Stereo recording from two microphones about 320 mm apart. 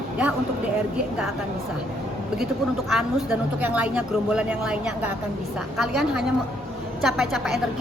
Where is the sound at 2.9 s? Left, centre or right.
Centre.